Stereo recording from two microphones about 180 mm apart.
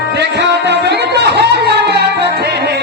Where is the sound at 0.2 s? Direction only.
70° right (ahead or behind).